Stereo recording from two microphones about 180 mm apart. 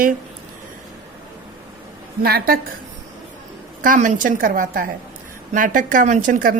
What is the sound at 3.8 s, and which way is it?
A woman's voice, 45° right (ahead or behind).